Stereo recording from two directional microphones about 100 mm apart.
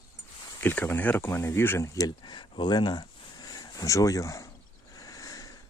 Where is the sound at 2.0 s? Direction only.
45° left (ahead or behind).